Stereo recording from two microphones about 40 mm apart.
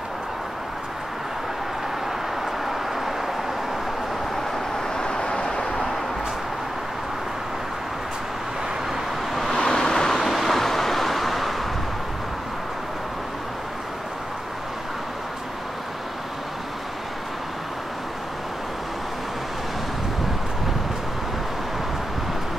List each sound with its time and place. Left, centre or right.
2.6 s vehicle: centre
4.7 s vehicle: centre
9.5 s vehicle: centre
10.1 s vehicle: centre